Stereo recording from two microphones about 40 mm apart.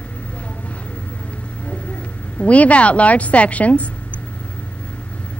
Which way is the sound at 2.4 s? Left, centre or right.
Left.